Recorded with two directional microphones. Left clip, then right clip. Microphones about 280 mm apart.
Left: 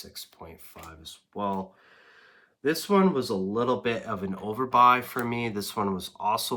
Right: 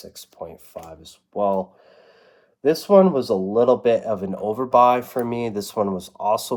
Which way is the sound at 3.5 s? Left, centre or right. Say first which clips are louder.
Right 12 dB; left.